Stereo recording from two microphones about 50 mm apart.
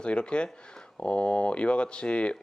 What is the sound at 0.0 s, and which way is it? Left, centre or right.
Speech, centre.